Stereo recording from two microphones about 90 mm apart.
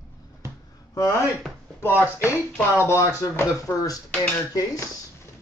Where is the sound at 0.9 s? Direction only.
35° left (ahead or behind).